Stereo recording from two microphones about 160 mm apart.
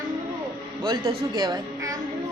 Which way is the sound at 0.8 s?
30° right (ahead or behind).